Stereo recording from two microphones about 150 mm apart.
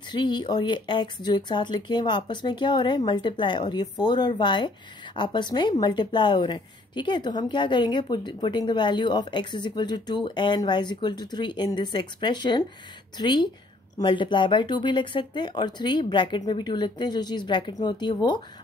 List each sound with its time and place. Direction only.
0.1 s speech: 30° left (ahead or behind)